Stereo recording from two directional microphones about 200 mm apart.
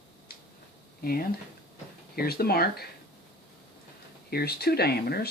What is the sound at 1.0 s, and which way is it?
Speech, 50° left (ahead or behind).